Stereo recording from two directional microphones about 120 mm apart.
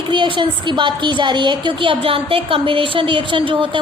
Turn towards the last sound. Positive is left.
turn(degrees=-45)  # may be behind; listen again after turning